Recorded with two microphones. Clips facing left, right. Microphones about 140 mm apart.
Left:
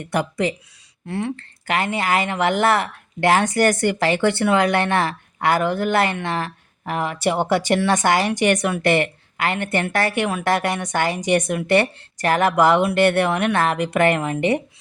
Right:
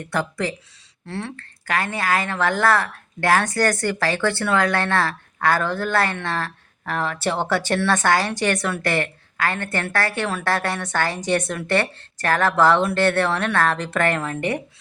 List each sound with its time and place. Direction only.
0.0 s speech: 20° left (ahead or behind)